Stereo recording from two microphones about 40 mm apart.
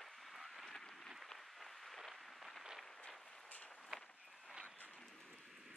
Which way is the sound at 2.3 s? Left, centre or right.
Centre.